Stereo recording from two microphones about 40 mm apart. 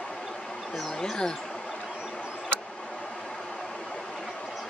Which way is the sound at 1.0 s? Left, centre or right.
Centre.